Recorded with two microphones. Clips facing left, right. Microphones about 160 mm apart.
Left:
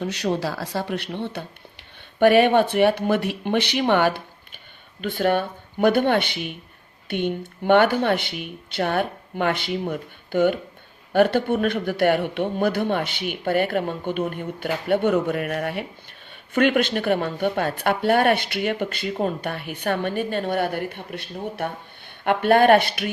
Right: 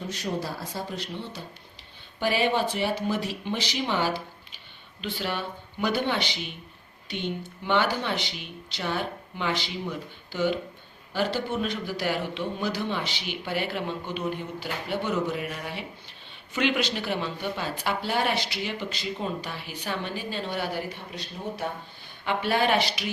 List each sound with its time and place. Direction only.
0.0 s speech: 75° left (ahead or behind); by 23.1 s 55° left (ahead or behind)